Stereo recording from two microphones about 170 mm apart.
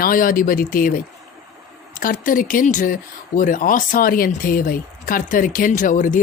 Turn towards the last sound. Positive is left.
turn(degrees=50)  # may be behind; listen again after turning